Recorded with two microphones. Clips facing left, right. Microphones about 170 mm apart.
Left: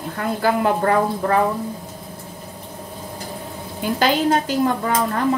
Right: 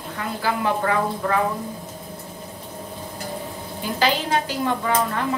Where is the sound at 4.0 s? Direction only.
45° left (ahead or behind).